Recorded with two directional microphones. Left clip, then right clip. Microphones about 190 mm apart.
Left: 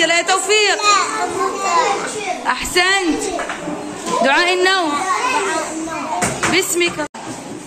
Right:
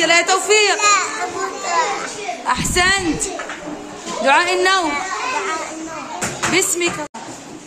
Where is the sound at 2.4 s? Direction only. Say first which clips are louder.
Even; 15° right (ahead or behind).